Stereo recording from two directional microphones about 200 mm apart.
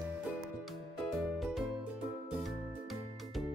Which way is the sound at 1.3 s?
Centre (ahead or behind).